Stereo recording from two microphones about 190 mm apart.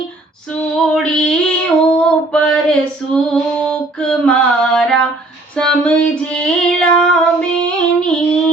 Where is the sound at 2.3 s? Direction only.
5° left (ahead or behind).